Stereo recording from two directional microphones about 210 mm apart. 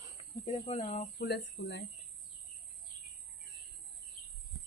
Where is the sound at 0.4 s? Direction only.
30° left (ahead or behind).